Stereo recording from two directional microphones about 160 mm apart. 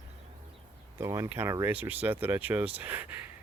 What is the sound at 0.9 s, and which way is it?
Speech, 15° right (ahead or behind).